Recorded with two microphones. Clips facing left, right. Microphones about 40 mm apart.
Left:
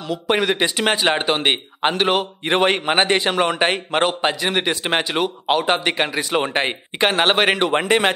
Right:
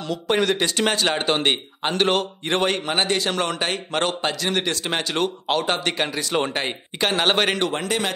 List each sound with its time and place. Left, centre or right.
0.3 s a man's voice: centre
6.5 s a man's voice: left